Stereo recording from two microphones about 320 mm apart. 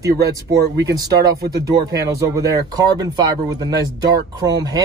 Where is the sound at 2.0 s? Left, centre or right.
Centre.